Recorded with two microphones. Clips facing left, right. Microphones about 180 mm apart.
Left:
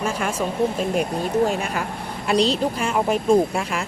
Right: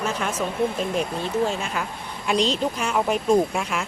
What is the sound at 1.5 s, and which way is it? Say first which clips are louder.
Speech: left 3 dB; 50° left (ahead or behind).